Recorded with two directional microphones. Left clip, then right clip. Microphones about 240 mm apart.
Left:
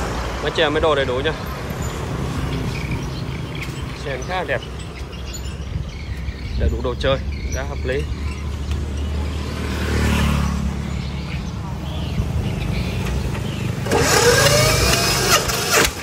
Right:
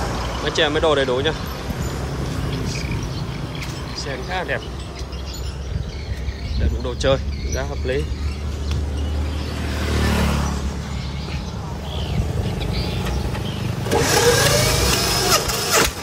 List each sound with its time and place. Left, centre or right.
0.5 s speech: centre
4.0 s speech: centre
6.6 s speech: centre
10.1 s vehicle: right
13.8 s a sound: centre